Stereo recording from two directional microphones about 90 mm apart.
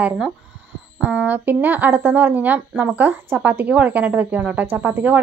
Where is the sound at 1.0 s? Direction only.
15° right (ahead or behind).